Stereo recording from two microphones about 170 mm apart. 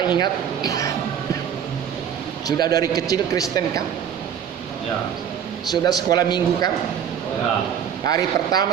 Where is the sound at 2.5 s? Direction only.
25° left (ahead or behind).